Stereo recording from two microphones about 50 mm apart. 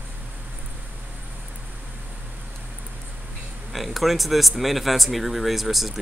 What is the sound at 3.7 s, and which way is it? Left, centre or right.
Speech, centre.